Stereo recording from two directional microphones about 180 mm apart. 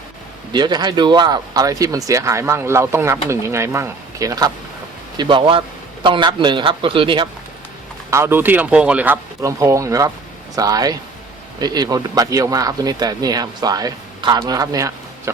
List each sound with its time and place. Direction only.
0.5 s speech: 25° right (ahead or behind)
8.1 s speech: 15° right (ahead or behind)